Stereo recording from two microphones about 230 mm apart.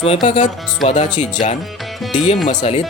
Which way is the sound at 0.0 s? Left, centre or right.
Left.